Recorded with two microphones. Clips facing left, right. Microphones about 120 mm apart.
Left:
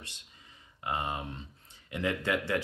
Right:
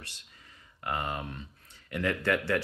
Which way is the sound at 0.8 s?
20° left (ahead or behind).